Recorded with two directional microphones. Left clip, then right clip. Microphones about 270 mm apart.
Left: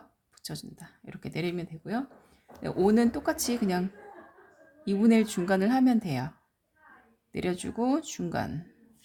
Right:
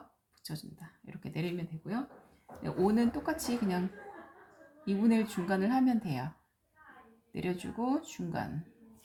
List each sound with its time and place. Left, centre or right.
0.4 s speech: left
4.9 s speech: left
7.3 s speech: left